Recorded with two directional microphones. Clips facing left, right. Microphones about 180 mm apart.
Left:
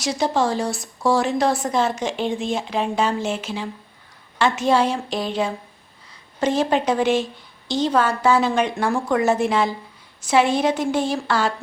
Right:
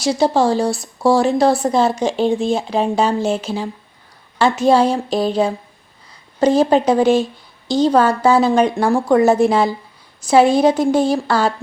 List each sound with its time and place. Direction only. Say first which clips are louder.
0.0 s speech: right 6 dB; 35° right (ahead or behind)